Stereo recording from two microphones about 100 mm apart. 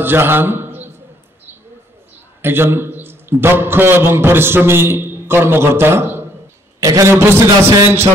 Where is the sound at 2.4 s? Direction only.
20° right (ahead or behind).